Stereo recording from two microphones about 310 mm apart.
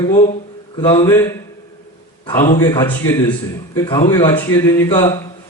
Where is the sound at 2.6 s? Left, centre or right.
Centre.